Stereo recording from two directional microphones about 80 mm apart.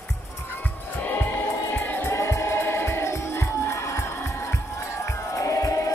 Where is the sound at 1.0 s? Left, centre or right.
Left.